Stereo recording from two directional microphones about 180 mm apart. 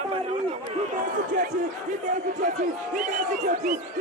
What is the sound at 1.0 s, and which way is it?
Speech, 45° right (ahead or behind).